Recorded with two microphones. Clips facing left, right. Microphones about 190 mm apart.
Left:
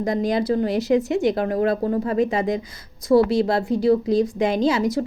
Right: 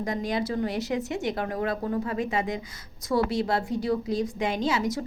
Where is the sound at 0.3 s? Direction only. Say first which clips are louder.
Left 7 dB; 35° left (ahead or behind).